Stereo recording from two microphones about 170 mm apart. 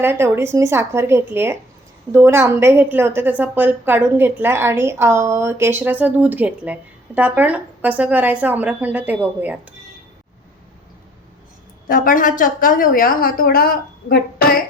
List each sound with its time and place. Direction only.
0.0 s a woman's voice: 15° right (ahead or behind)
11.9 s a woman's voice: 55° left (ahead or behind)